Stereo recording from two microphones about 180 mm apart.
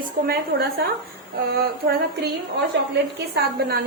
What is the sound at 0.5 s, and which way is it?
Speech, 60° right (ahead or behind).